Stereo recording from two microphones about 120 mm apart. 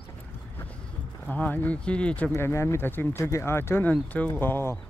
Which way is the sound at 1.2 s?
15° left (ahead or behind).